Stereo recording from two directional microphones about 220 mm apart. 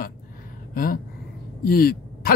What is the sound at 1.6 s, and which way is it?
Throat clearing, 40° left (ahead or behind).